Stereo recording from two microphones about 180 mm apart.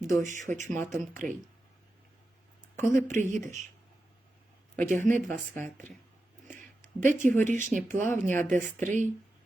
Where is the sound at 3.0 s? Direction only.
40° right (ahead or behind).